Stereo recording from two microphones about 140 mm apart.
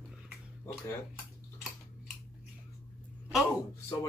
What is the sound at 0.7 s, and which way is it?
Speech, 20° left (ahead or behind).